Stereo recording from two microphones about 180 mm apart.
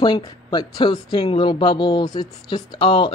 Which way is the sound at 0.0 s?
25° left (ahead or behind).